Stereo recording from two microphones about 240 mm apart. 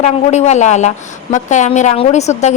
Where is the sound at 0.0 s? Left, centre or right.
Left.